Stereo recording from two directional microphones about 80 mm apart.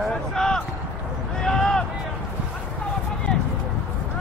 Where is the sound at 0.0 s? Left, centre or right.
Centre.